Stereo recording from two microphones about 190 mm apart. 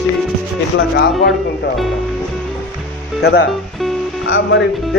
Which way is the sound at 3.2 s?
65° left (ahead or behind).